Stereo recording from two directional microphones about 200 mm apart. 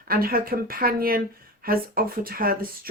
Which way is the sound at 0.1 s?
45° right (ahead or behind).